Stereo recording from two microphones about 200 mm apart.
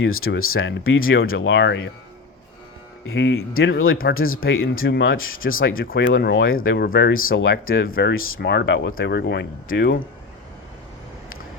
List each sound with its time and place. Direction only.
0.0 s speech: 90° left; by 1.9 s 65° left (ahead or behind)
3.1 s speech: 75° left (ahead or behind)
5.4 s speech: 45° left (ahead or behind)
7.3 s speech: 70° left (ahead or behind)
7.7 s speech: 45° left (ahead or behind)
8.1 s speech: 90° left
8.4 s speech: 60° left (ahead or behind)